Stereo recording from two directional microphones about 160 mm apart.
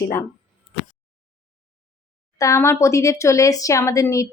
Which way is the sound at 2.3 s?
20° left (ahead or behind).